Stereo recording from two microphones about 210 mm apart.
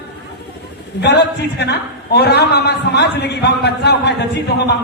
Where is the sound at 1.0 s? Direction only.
55° left (ahead or behind).